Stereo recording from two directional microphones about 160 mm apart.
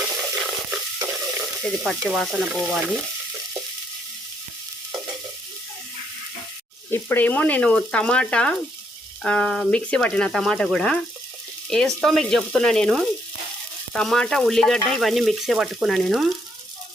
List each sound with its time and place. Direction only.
0.2 s stir: 5° right (ahead or behind)
1.6 s speech: centre (ahead or behind)
6.9 s frying: 15° left (ahead or behind)
9.2 s speech: 5° left (ahead or behind)